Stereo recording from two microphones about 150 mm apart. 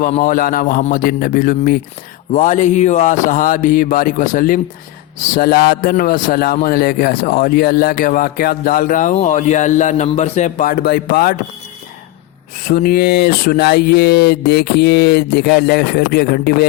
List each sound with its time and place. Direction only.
0.2 s speech: 70° left (ahead or behind)
2.3 s speech: 55° left (ahead or behind)
5.4 s a man's voice: 85° left
12.6 s speech: 85° left